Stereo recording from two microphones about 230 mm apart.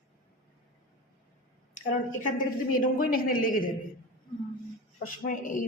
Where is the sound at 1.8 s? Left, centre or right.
Left.